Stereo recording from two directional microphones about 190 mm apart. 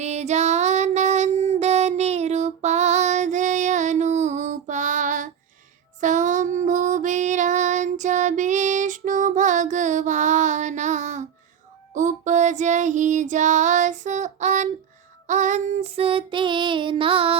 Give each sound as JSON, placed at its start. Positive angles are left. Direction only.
{"t": 0.0, "sound": "music", "side_deg": -35}
{"t": 11.9, "sound": "female singing", "side_deg": -40}
{"t": 15.3, "sound": "child singing", "side_deg": -40}